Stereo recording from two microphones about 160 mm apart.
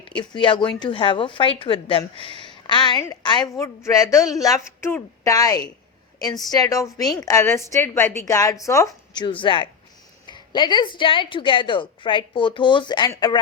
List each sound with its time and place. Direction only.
0.2 s a woman's voice: 30° left (ahead or behind)